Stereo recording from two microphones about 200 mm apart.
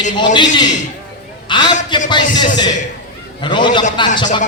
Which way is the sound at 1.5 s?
20° left (ahead or behind).